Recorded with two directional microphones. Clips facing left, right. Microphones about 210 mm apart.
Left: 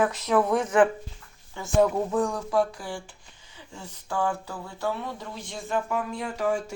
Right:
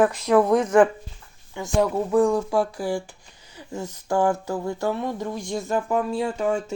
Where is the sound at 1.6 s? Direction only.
15° right (ahead or behind).